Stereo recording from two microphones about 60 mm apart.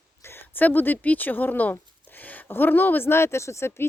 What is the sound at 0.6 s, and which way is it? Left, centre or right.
Speech, left.